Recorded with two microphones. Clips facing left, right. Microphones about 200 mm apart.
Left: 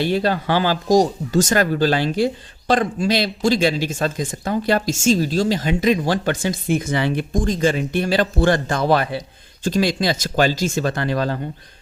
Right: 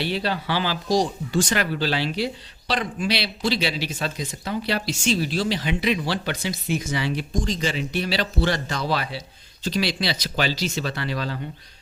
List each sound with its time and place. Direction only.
0.0 s speech: 45° left (ahead or behind)